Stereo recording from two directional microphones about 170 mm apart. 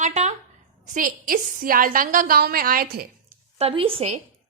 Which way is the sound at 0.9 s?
55° right (ahead or behind).